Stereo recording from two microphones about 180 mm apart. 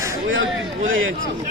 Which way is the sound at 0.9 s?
90° right.